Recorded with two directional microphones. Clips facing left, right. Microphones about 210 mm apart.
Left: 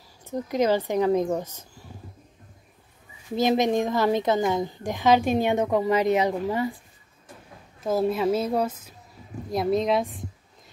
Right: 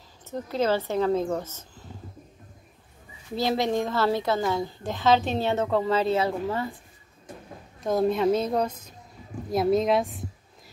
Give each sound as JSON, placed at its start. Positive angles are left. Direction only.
{"t": 0.2, "sound": "speech", "side_deg": 15}
{"t": 3.3, "sound": "a woman's voice", "side_deg": 15}
{"t": 7.8, "sound": "a woman's voice", "side_deg": 5}